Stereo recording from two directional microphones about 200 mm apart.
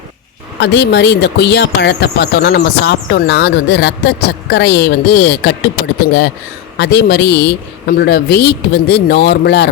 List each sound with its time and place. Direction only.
0.6 s speech: 60° left (ahead or behind)
6.7 s speech: 55° left (ahead or behind)